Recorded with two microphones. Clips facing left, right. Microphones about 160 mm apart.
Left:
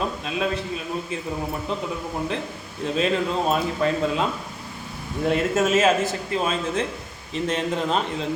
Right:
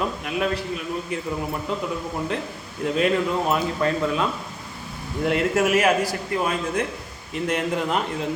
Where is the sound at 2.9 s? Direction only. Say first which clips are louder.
Right 1 dB; 25° left (ahead or behind).